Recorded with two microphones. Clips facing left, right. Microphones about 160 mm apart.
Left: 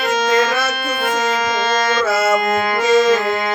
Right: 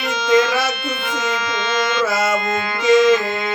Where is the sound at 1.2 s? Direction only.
45° left (ahead or behind).